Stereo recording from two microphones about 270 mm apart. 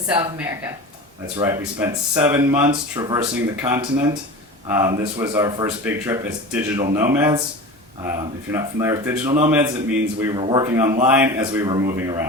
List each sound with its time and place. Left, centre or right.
0.1 s speech: centre
8.5 s speech: centre